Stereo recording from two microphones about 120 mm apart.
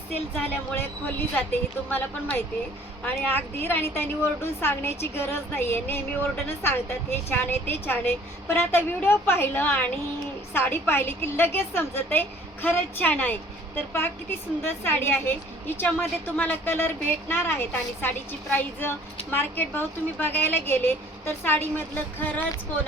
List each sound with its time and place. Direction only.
0.1 s a woman's voice: 15° left (ahead or behind)
3.0 s a woman's voice: 15° left (ahead or behind)